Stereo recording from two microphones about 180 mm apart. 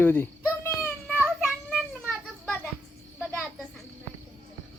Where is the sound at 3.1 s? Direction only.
Centre (ahead or behind).